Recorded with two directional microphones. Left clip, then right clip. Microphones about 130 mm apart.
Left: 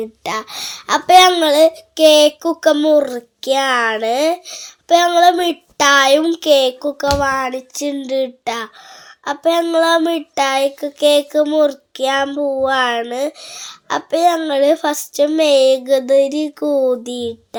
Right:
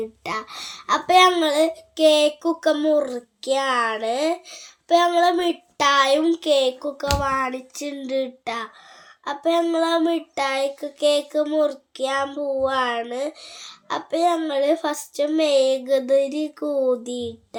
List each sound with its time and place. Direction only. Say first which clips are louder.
0.0 s speech: left 6 dB; 40° left (ahead or behind)
9.2 s child singing: left 5 dB; 40° left (ahead or behind)
12.3 s speech: left 6 dB; 40° left (ahead or behind)